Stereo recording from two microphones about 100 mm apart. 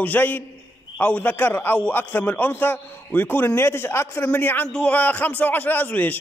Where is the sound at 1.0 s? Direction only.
20° left (ahead or behind).